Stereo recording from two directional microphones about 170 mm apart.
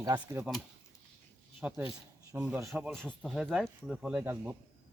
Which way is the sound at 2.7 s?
Centre (ahead or behind).